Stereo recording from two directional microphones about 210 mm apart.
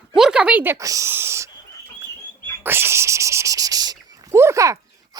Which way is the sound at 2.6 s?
10° right (ahead or behind).